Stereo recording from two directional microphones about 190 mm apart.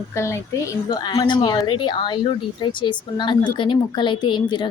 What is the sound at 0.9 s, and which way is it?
Speech, 20° left (ahead or behind).